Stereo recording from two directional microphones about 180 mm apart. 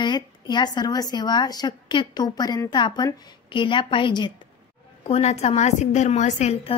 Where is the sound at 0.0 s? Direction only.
25° left (ahead or behind).